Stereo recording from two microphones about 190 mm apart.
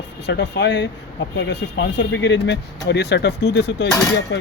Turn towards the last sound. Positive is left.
turn(degrees=60)  # may be behind; listen again after turning